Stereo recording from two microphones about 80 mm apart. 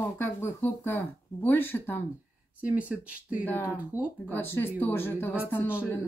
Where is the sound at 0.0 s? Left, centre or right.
Left.